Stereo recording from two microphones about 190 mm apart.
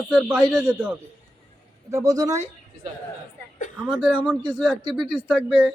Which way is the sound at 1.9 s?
15° right (ahead or behind).